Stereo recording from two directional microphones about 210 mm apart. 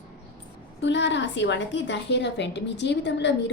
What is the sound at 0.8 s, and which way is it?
A woman's voice, 55° left (ahead or behind).